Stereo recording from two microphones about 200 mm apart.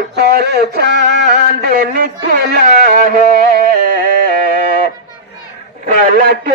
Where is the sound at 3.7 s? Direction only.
45° right (ahead or behind).